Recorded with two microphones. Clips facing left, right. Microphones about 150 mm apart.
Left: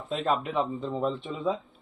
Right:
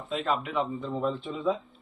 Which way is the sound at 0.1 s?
35° left (ahead or behind).